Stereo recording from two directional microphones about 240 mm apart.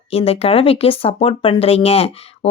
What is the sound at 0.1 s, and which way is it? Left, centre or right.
Speech, left.